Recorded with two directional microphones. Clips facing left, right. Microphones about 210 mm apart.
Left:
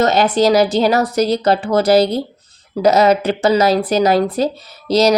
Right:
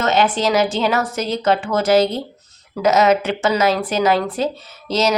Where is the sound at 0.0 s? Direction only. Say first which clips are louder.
Left 4 dB; 35° left (ahead or behind).